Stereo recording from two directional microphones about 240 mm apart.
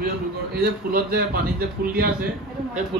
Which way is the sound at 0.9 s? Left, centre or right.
Right.